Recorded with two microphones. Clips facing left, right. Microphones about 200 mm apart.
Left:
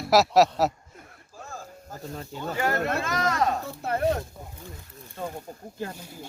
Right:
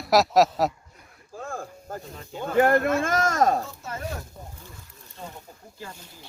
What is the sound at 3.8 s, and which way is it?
Speech, 60° left (ahead or behind).